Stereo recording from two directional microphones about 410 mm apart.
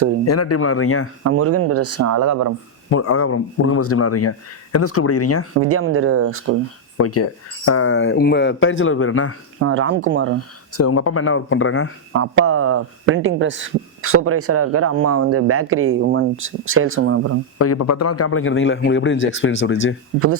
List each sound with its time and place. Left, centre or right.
0.3 s speech: left
1.2 s speech: right
2.9 s speech: left
5.6 s speech: right
6.9 s speech: left
9.6 s speech: right
10.8 s speech: left
12.1 s speech: right
17.6 s speech: left
20.1 s speech: right